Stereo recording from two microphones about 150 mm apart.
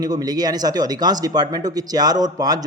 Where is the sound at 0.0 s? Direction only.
25° right (ahead or behind).